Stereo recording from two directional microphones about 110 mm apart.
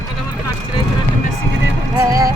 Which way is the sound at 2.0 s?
30° right (ahead or behind).